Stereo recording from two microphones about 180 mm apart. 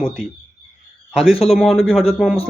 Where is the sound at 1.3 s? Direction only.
35° left (ahead or behind).